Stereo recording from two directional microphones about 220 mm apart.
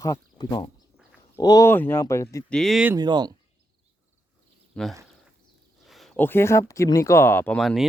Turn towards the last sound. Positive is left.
turn(degrees=0)  # may be behind; listen again after turning